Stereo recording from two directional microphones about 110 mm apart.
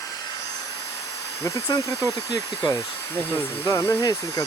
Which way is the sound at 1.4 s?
30° left (ahead or behind).